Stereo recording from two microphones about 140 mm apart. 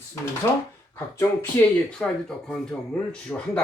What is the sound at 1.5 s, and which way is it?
Speech, 20° left (ahead or behind).